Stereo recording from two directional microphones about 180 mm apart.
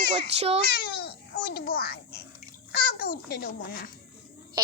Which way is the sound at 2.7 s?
55° left (ahead or behind).